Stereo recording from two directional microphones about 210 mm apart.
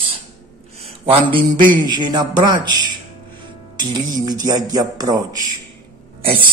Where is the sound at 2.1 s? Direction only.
20° right (ahead or behind).